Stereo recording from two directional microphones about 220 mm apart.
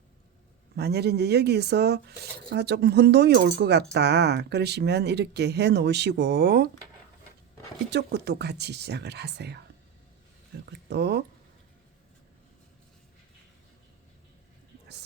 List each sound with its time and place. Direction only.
0.8 s speech: 50° right (ahead or behind)
7.9 s speech: 50° right (ahead or behind)
10.7 s speech: 50° right (ahead or behind)